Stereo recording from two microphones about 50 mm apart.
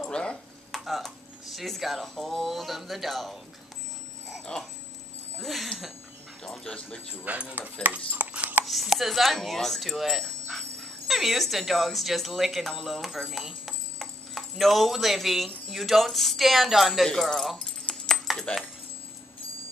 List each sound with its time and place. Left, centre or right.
0.1 s a sound: centre
0.7 s speech: centre
4.5 s dog: left
5.4 s speech: centre
6.4 s speech: centre
7.2 s speech: right
8.2 s dog: right
8.6 s speech: centre
17.1 s speech: centre
17.8 s dog: centre